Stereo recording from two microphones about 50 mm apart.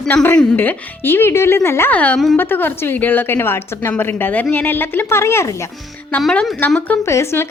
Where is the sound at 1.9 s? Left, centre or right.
Left.